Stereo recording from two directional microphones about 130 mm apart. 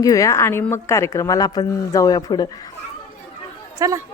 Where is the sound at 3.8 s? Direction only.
25° right (ahead or behind).